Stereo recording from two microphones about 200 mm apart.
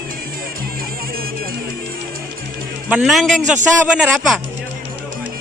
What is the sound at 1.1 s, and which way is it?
Music, 45° right (ahead or behind).